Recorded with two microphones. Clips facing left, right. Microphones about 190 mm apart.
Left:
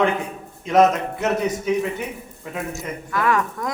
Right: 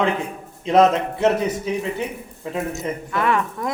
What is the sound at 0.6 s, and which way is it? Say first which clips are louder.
A man's voice: right 1 dB; 30° right (ahead or behind).